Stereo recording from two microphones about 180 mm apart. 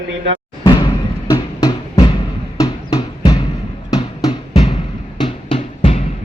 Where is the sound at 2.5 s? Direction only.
20° left (ahead or behind).